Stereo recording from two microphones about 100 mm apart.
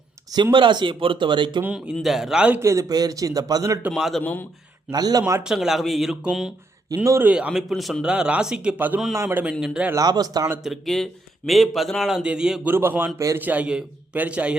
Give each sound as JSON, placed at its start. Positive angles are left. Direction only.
{"t": 0.5, "sound": "speech", "side_deg": -50}
{"t": 1.6, "sound": "a man's voice", "side_deg": -10}
{"t": 2.6, "sound": "speech", "side_deg": -30}
{"t": 3.9, "sound": "speech", "side_deg": 0}
{"t": 4.2, "sound": "a man's voice", "side_deg": 20}
{"t": 4.9, "sound": "speech", "side_deg": -40}
{"t": 5.4, "sound": "a man's voice", "side_deg": -5}
{"t": 9.1, "sound": "a man's voice", "side_deg": -25}
{"t": 9.4, "sound": "a man's voice", "side_deg": -10}
{"t": 9.9, "sound": "speech", "side_deg": -40}
{"t": 10.6, "sound": "speech", "side_deg": 0}
{"t": 12.6, "sound": "a man's voice", "side_deg": -20}
{"t": 13.4, "sound": "a man's voice", "side_deg": -15}